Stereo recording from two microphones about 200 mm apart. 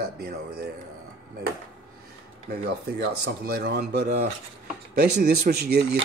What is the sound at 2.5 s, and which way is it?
Speech, 50° right (ahead or behind).